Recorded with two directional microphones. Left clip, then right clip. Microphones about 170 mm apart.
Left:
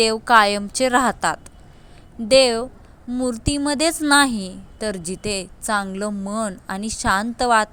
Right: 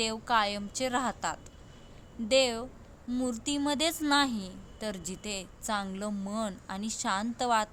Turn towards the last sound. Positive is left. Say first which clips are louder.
# left 11 dB
turn(degrees=35)  # may be behind; listen again after turning